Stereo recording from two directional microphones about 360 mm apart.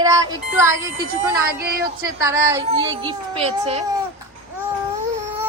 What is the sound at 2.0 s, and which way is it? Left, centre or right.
Speech, centre.